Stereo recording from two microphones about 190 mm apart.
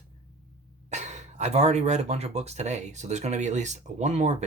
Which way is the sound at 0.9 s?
35° right (ahead or behind).